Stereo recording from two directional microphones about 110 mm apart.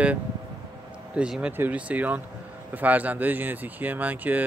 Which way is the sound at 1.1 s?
10° right (ahead or behind).